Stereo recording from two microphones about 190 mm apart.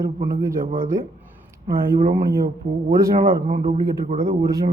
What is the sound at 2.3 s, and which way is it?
Speech, 50° right (ahead or behind).